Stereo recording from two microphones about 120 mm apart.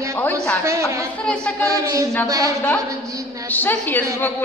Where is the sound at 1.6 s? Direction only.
25° right (ahead or behind).